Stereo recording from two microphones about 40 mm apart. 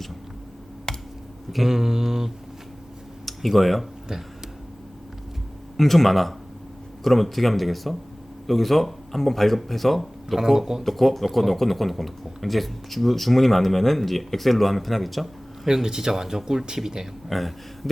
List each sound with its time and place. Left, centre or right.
0.9 s a sound: centre
1.5 s speech: centre
3.2 s speech: centre
5.7 s speech: centre
10.8 s speech: centre
15.6 s speech: centre
17.2 s speech: centre